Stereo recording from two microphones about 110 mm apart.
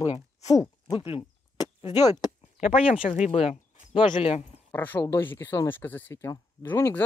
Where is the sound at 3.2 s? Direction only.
60° left (ahead or behind).